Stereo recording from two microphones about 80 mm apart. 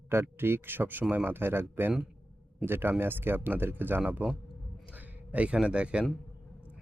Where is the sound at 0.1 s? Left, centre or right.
Right.